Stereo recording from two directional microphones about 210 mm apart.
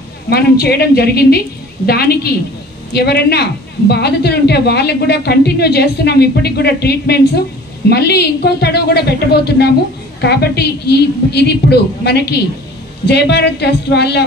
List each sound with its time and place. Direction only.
0.3 s a woman's voice: 50° left (ahead or behind)
2.9 s a woman's voice: 50° left (ahead or behind)